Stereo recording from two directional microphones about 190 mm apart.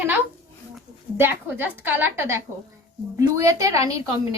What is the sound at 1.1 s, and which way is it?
A woman's voice, 10° right (ahead or behind).